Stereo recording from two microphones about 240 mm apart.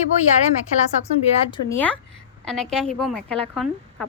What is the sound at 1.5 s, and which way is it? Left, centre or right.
A woman's voice, centre.